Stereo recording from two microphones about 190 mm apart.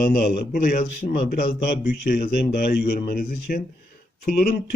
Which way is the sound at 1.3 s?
60° left (ahead or behind).